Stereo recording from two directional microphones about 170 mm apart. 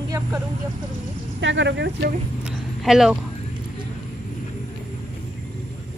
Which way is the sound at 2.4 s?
Centre (ahead or behind).